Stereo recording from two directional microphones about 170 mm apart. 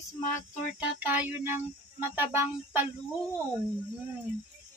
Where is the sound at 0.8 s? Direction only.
10° right (ahead or behind).